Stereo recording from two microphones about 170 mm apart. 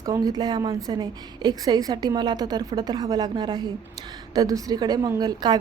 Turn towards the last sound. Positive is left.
turn(degrees=-25)  # may be behind; listen again after turning